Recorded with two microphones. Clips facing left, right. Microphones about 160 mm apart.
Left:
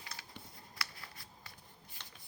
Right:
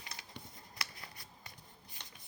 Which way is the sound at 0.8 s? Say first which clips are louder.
Left 1 dB; 20° right (ahead or behind).